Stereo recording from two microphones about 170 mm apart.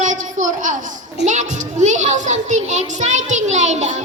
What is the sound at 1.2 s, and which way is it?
A child's voice, 45° right (ahead or behind).